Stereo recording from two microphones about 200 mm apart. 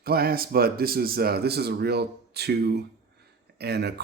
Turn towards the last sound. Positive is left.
turn(degrees=-55)  # may be behind; listen again after turning